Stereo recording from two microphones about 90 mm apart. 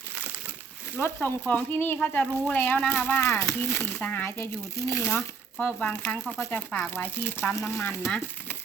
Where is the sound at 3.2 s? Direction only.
30° left (ahead or behind).